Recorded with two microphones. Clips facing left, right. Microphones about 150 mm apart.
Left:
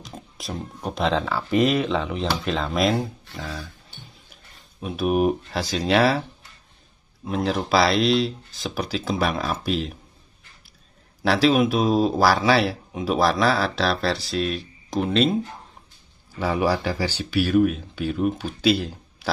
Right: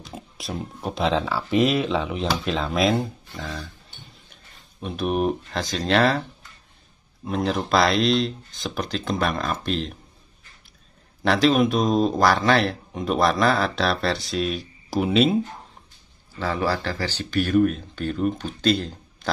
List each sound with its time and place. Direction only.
0.0 s speech: centre (ahead or behind)
7.2 s speech: centre (ahead or behind)
11.2 s speech: centre (ahead or behind)
16.3 s speech: 15° left (ahead or behind)